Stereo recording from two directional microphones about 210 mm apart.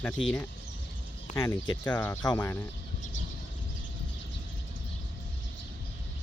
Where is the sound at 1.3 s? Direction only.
15° left (ahead or behind).